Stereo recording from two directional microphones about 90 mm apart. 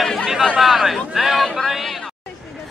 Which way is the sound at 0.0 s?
5° left (ahead or behind).